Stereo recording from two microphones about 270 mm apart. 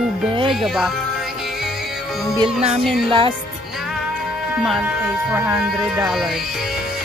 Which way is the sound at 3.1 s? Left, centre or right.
Centre.